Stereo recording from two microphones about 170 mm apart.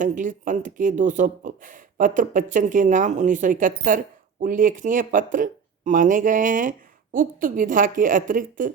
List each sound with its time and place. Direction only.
0.0 s speech: 50° right (ahead or behind)